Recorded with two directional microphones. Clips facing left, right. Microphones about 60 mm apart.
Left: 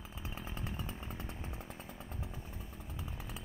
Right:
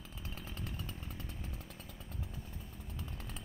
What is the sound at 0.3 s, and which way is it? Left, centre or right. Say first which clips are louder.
Chainsaw: left 2 dB; centre.